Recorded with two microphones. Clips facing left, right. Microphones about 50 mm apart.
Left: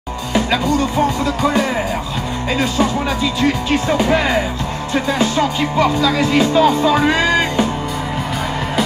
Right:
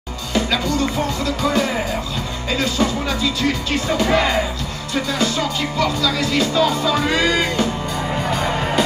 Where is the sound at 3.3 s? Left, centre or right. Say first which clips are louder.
Left 4 dB; centre.